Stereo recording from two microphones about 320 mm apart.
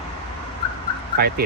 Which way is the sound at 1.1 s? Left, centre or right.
Right.